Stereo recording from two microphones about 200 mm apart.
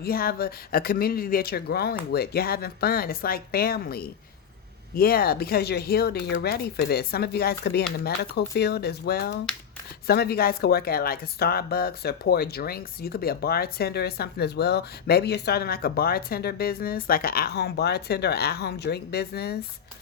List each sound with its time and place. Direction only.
0.0 s speech: 50° left (ahead or behind)